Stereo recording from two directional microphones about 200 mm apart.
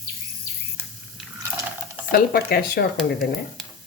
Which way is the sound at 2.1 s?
50° left (ahead or behind).